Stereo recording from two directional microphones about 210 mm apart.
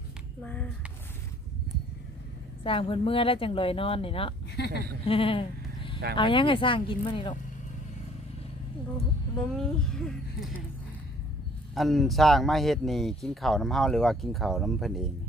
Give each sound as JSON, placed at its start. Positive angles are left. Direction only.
{"t": 0.4, "sound": "speech", "side_deg": 5}
{"t": 2.6, "sound": "speech", "side_deg": 25}
{"t": 4.5, "sound": "speech", "side_deg": 50}
{"t": 5.0, "sound": "sheep", "side_deg": 25}
{"t": 6.1, "sound": "speech", "side_deg": 25}
{"t": 9.5, "sound": "speech", "side_deg": 0}
{"t": 11.7, "sound": "speech", "side_deg": 0}